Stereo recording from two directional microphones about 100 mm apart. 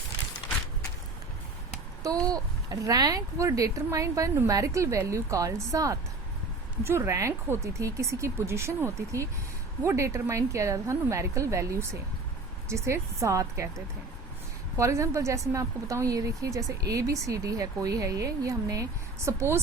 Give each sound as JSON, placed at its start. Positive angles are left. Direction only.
{"t": 2.2, "sound": "a woman's voice", "side_deg": -40}
{"t": 14.8, "sound": "a woman's voice", "side_deg": -30}